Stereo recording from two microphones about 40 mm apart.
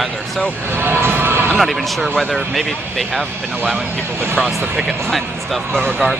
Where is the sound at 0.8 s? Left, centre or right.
Right.